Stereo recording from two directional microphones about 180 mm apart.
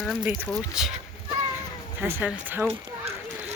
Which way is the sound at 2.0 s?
10° right (ahead or behind).